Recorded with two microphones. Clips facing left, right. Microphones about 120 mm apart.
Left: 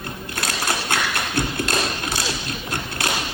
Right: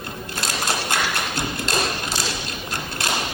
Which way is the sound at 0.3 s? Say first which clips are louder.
Even; 55° left (ahead or behind).